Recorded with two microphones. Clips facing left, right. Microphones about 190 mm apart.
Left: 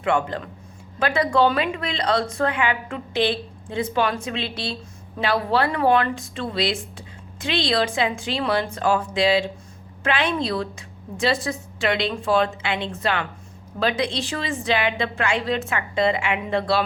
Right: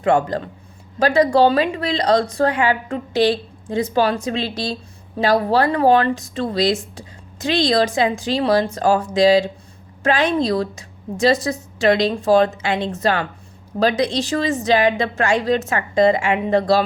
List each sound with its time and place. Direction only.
0.0 s a woman's voice: 40° right (ahead or behind)